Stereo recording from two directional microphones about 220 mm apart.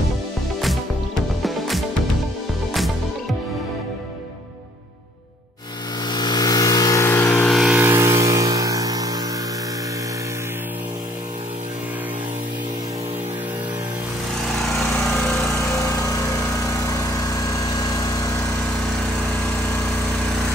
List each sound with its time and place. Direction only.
1.4 s music: centre (ahead or behind)
6.0 s vehicle: 20° left (ahead or behind)
7.4 s vehicle: centre (ahead or behind)
15.0 s lawn mower: centre (ahead or behind)
15.4 s lawn mower: 15° left (ahead or behind)